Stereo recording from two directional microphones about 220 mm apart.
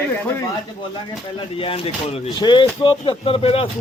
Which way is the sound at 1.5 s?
25° left (ahead or behind).